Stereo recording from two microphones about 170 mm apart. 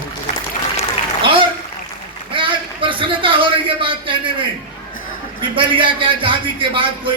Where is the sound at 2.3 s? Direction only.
30° right (ahead or behind).